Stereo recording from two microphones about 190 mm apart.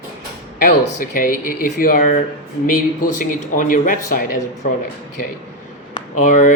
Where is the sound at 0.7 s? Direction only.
45° left (ahead or behind).